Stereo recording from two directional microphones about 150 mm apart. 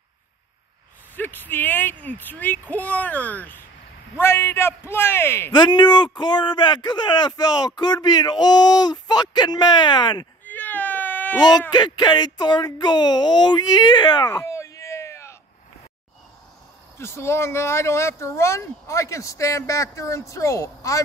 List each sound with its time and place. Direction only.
1.1 s speech: 10° left (ahead or behind)
5.5 s speech: 30° left (ahead or behind)
10.4 s baby cry: 10° left (ahead or behind)
11.7 s speech: 30° left (ahead or behind)
17.0 s speech: 15° left (ahead or behind)